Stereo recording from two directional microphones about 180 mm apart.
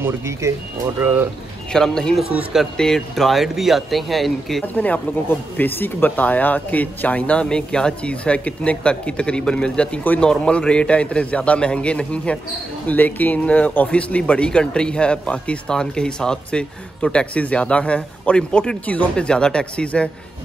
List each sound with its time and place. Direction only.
0.0 s speech: 15° right (ahead or behind)
1.7 s speech: 5° left (ahead or behind)